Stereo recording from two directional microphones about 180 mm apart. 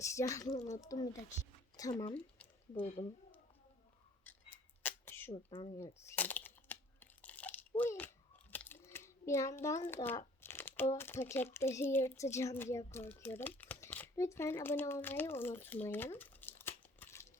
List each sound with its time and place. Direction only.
0.0 s speech: 15° left (ahead or behind)
2.1 s a sound: 10° left (ahead or behind)
2.8 s speech: 30° left (ahead or behind)
4.2 s scissors: 10° left (ahead or behind)
5.5 s speech: 30° left (ahead or behind)
5.7 s a sound: 15° left (ahead or behind)
7.8 s biting: 10° left (ahead or behind)
10.9 s speech: 15° left (ahead or behind)